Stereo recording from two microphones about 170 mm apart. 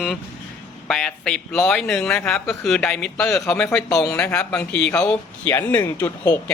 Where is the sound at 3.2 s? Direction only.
15° left (ahead or behind).